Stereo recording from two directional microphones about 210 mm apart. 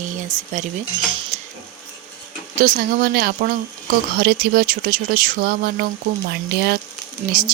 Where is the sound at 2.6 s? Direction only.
45° right (ahead or behind).